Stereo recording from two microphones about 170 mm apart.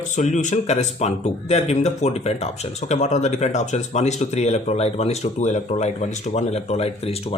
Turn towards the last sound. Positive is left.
turn(degrees=35)  # may be behind; listen again after turning